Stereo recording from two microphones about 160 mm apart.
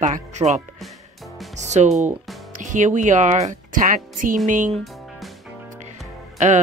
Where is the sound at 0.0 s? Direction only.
50° right (ahead or behind).